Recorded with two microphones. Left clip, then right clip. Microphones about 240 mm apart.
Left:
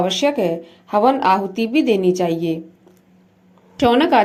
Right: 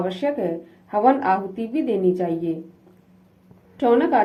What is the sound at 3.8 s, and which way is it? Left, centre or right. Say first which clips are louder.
Speech: left 4 dB; left.